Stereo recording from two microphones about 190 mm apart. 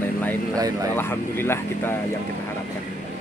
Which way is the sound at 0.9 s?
10° left (ahead or behind).